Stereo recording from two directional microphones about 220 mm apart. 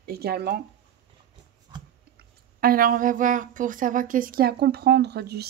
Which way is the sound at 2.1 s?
40° right (ahead or behind).